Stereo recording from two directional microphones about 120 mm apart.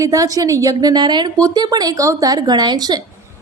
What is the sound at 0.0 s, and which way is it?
A woman's voice, 30° right (ahead or behind).